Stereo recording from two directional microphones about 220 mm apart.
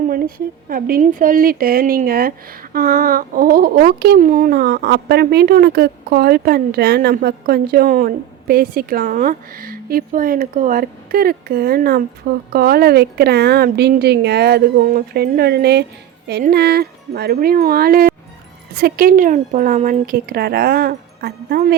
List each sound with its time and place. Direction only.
0.1 s a woman's voice: 40° right (ahead or behind)